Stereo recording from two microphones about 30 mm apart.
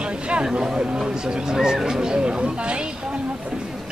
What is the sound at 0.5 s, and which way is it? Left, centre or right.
Speech, right.